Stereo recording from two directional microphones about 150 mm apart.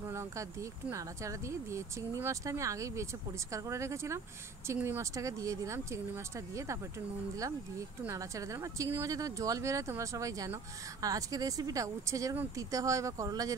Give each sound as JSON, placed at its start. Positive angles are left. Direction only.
{"t": 0.0, "sound": "speech", "side_deg": -20}
{"t": 8.1, "sound": "speech", "side_deg": -20}